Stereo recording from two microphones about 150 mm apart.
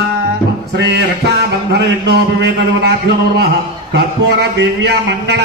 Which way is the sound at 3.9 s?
90° right.